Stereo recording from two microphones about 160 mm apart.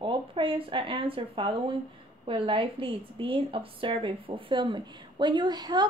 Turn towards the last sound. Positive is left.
turn(degrees=-25)  # may be behind; listen again after turning